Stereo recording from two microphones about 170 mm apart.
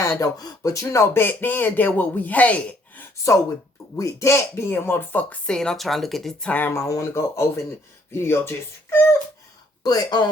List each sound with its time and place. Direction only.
0.2 s speech: 20° left (ahead or behind)
9.8 s speech: 25° left (ahead or behind)